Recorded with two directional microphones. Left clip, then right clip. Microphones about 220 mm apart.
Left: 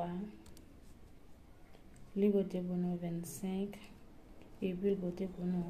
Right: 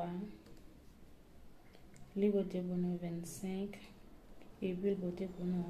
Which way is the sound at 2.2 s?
10° left (ahead or behind).